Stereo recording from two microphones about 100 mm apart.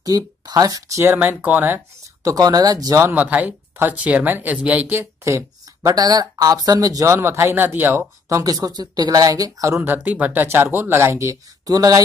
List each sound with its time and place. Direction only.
0.0 s speech: 40° right (ahead or behind)
1.1 s speech: 15° right (ahead or behind)
2.2 s speech: 35° right (ahead or behind)
3.0 s speech: 20° right (ahead or behind)
4.9 s speech: 30° right (ahead or behind)
8.3 s speech: 35° right (ahead or behind)
9.8 s speech: 15° right (ahead or behind); by 12.0 s 35° right (ahead or behind)